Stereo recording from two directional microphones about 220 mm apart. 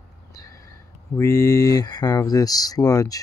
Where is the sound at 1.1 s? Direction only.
15° left (ahead or behind).